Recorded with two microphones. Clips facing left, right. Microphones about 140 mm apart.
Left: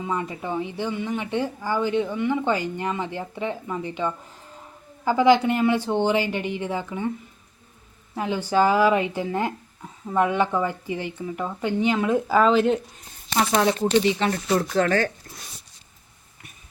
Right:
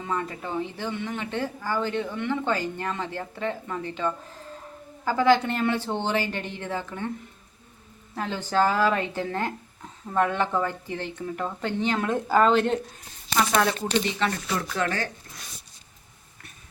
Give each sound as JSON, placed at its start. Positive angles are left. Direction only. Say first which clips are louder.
{"t": 0.0, "sound": "speech", "louder": "left 2 dB", "side_deg": 15}
{"t": 8.1, "sound": "speech", "louder": "left 3 dB", "side_deg": 15}
{"t": 14.2, "sound": "speech", "louder": "left 5 dB", "side_deg": 35}
{"t": 14.8, "sound": "speech", "louder": "left 7 dB", "side_deg": 55}